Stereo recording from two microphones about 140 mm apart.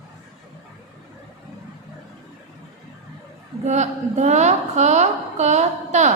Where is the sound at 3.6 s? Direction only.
55° right (ahead or behind).